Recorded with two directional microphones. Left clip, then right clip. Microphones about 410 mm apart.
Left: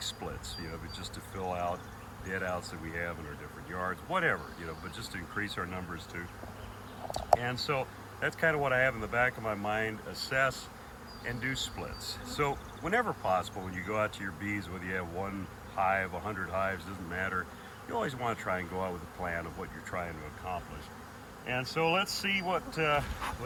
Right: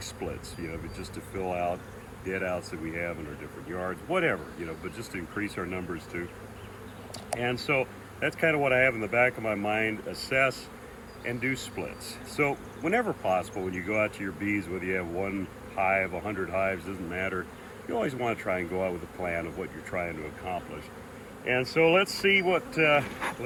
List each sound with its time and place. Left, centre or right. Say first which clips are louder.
1.5 s speech: right 4 dB; centre
5.4 s speech: right 2 dB; centre
7.4 s speech: right 5 dB; centre
21.8 s speech: right 7 dB; centre
22.0 s speech: right 8 dB; left
22.4 s speech: right 7 dB; centre